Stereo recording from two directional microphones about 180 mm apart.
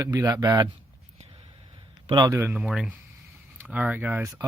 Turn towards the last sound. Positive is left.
turn(degrees=-10)  # may be behind; listen again after turning